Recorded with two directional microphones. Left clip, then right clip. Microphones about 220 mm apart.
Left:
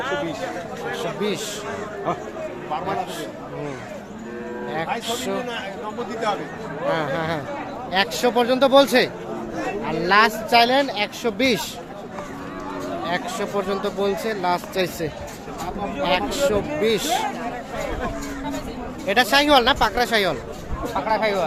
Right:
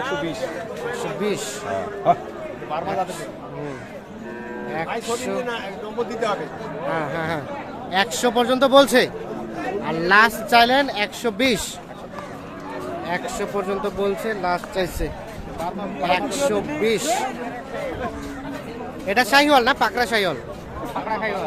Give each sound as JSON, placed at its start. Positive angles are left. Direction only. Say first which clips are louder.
{"t": 0.9, "sound": "speech", "louder": "even", "side_deg": 0}
{"t": 2.1, "sound": "speech", "louder": "right 8 dB", "side_deg": -55}
{"t": 5.0, "sound": "speech", "louder": "even", "side_deg": 0}
{"t": 6.9, "sound": "speech", "louder": "even", "side_deg": 0}
{"t": 13.1, "sound": "speech", "louder": "even", "side_deg": 0}
{"t": 16.5, "sound": "speech", "louder": "even", "side_deg": 0}
{"t": 19.0, "sound": "speech", "louder": "right 1 dB", "side_deg": 0}
{"t": 20.9, "sound": "a sound", "louder": "left 4 dB", "side_deg": 50}